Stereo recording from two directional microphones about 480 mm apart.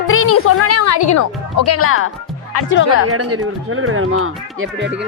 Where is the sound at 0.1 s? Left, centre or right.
Left.